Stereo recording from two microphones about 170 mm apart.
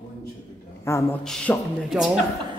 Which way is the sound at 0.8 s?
15° left (ahead or behind).